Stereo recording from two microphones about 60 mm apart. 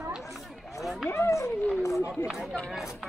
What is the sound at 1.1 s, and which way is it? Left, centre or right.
Speech, left.